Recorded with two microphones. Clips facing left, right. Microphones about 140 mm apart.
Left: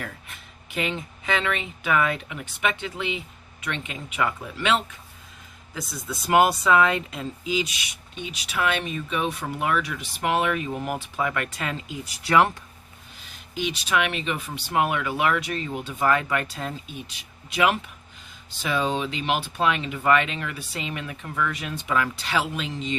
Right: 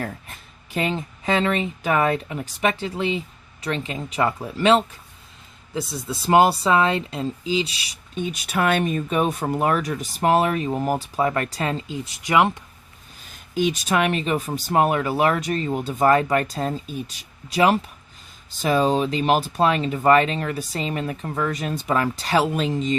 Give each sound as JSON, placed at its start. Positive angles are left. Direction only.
{"t": 0.0, "sound": "speech", "side_deg": -35}
{"t": 13.5, "sound": "speech", "side_deg": -45}